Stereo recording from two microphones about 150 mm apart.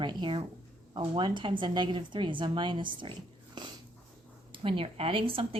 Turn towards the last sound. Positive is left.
turn(degrees=-35)  # may be behind; listen again after turning